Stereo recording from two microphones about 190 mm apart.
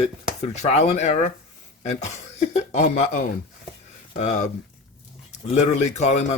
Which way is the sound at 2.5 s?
35° left (ahead or behind).